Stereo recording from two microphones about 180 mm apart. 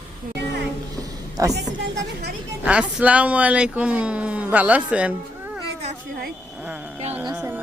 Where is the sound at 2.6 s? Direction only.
5° right (ahead or behind).